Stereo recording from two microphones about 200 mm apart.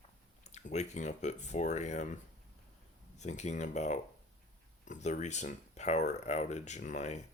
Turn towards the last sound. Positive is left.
turn(degrees=35)  # may be behind; listen again after turning